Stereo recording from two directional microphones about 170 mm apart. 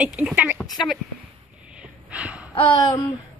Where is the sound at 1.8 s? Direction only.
5° right (ahead or behind).